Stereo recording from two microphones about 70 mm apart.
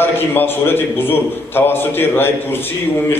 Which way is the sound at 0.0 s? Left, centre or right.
Left.